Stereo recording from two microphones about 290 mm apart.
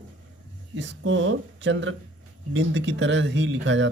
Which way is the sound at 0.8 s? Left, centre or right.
Right.